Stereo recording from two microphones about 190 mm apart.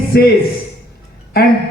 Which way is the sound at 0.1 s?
55° left (ahead or behind).